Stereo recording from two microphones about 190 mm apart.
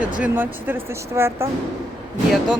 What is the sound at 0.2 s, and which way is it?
Speech, 10° right (ahead or behind).